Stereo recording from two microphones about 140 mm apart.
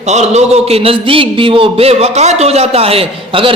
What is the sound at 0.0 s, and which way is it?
A man's voice, 55° right (ahead or behind).